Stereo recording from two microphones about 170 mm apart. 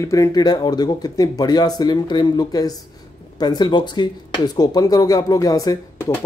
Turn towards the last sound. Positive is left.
turn(degrees=20)  # may be behind; listen again after turning